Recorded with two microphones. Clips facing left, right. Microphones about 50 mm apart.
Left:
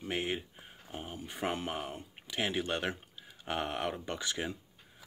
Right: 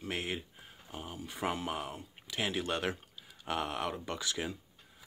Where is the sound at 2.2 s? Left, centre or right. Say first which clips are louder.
Left 1 dB; centre.